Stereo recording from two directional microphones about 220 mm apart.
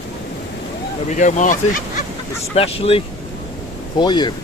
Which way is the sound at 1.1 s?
35° left (ahead or behind).